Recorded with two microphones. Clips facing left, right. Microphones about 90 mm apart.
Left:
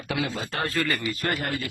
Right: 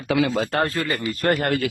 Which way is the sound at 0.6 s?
25° right (ahead or behind).